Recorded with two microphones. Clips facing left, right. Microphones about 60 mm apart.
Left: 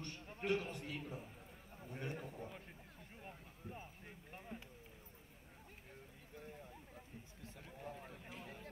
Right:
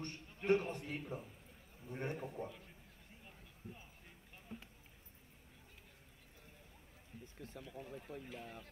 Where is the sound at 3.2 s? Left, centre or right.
Left.